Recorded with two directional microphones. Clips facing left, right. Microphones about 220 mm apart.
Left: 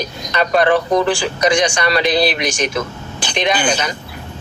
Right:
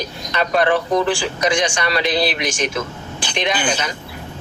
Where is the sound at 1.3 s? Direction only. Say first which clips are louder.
Left 3 dB; 40° left (ahead or behind).